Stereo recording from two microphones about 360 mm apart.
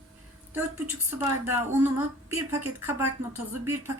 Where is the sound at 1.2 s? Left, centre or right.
Centre.